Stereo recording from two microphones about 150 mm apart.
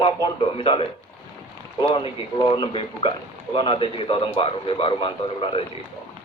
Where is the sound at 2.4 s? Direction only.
35° left (ahead or behind).